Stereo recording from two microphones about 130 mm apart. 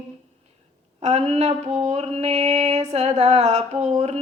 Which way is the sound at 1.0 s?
55° right (ahead or behind).